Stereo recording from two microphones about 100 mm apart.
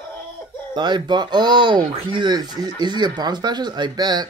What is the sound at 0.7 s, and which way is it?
Speech, 45° right (ahead or behind).